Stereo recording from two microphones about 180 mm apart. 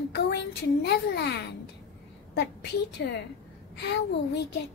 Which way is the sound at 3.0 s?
70° left (ahead or behind).